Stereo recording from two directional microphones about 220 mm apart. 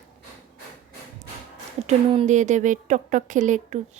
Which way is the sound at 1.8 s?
30° right (ahead or behind).